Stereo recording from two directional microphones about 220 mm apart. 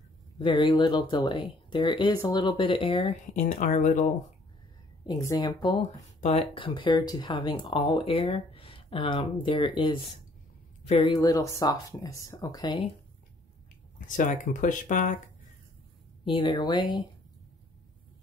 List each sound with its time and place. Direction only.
0.4 s speech: 20° left (ahead or behind)
5.0 s speech: 15° left (ahead or behind)
13.9 s speech: 35° left (ahead or behind)
16.3 s speech: 20° left (ahead or behind)